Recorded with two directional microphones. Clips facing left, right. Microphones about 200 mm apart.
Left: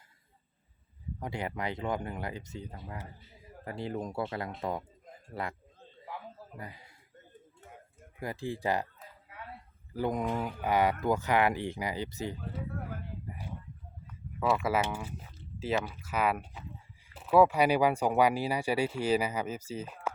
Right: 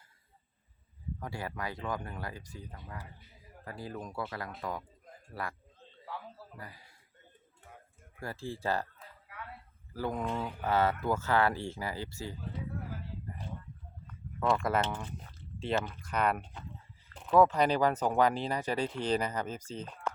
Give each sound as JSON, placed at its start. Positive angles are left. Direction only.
{"t": 1.2, "sound": "speech", "side_deg": 20}
{"t": 6.1, "sound": "a sound", "side_deg": 20}
{"t": 8.2, "sound": "speech", "side_deg": 15}
{"t": 9.9, "sound": "speech", "side_deg": 15}
{"t": 13.2, "sound": "a sound", "side_deg": 10}
{"t": 14.1, "sound": "speech", "side_deg": 5}